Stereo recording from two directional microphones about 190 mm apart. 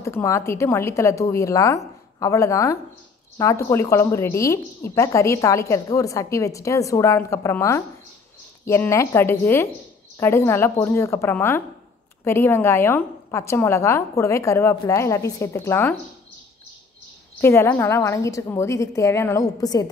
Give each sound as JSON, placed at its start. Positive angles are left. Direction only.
{"t": 0.0, "sound": "a woman's voice", "side_deg": 15}
{"t": 17.4, "sound": "a woman's voice", "side_deg": 15}